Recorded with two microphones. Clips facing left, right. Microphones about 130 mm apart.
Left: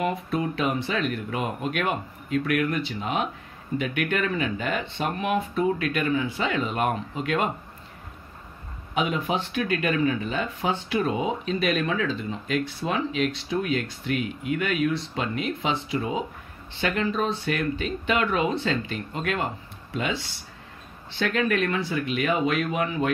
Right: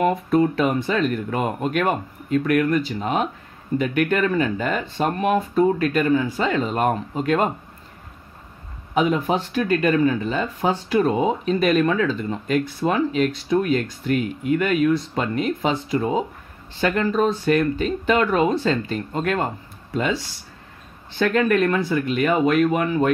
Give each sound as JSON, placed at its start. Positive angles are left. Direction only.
{"t": 0.3, "sound": "speech", "side_deg": -45}
{"t": 8.9, "sound": "speech", "side_deg": -40}
{"t": 21.2, "sound": "speech", "side_deg": -45}